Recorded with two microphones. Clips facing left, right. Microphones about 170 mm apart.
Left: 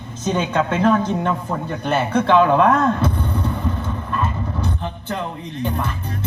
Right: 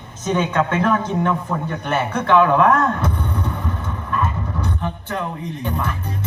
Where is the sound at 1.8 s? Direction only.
30° left (ahead or behind).